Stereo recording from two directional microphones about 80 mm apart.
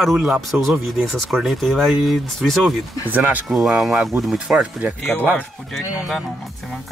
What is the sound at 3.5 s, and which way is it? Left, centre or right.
Speech, centre.